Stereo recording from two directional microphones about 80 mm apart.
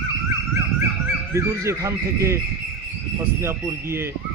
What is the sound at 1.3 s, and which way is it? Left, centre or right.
A man's voice, right.